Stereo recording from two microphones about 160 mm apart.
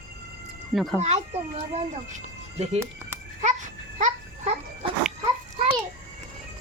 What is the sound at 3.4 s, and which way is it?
Babbling, 50° right (ahead or behind).